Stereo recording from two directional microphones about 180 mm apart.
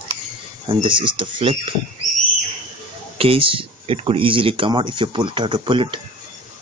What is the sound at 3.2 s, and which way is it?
Speech, 30° right (ahead or behind).